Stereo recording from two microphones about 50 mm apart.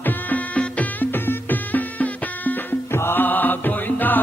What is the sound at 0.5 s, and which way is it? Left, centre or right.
Music, left.